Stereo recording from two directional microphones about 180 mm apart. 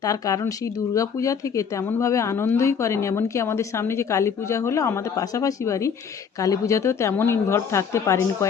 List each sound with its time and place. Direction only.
0.0 s speech: 20° left (ahead or behind)